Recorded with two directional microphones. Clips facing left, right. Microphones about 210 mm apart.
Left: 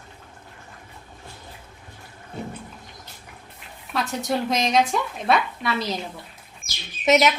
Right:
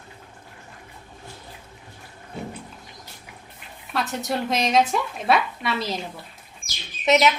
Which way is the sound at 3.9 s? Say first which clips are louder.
Left 1 dB; centre (ahead or behind).